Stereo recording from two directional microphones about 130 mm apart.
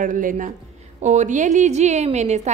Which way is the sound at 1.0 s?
65° right (ahead or behind).